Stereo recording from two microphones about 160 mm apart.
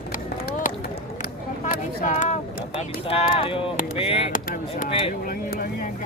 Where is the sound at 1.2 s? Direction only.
60° left (ahead or behind).